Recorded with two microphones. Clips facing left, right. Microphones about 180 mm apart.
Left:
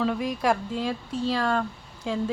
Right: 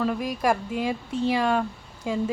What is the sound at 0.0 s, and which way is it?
Speech, 5° right (ahead or behind).